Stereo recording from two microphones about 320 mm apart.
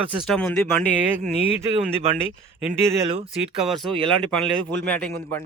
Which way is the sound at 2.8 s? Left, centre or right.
Centre.